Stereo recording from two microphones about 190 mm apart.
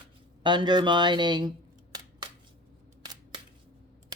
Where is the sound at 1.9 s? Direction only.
20° right (ahead or behind).